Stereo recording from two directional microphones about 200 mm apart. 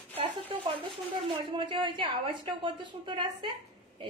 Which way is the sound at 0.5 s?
25° right (ahead or behind).